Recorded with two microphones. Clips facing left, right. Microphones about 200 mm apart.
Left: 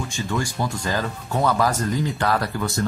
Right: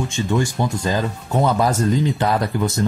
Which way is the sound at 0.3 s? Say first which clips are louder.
Right 5 dB; 20° right (ahead or behind).